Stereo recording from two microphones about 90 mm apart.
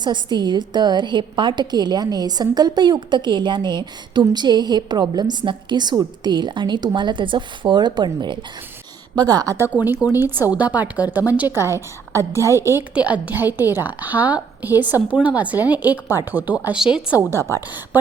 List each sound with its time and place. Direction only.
0.0 s a woman's voice: 55° right (ahead or behind)
9.1 s a woman's voice: 45° right (ahead or behind)
9.7 s a woman's voice: 20° right (ahead or behind)
12.9 s a woman's voice: 15° right (ahead or behind)
16.7 s a woman's voice: 10° right (ahead or behind)